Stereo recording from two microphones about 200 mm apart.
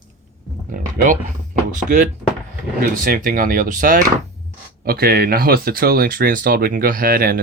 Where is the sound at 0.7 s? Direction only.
40° right (ahead or behind).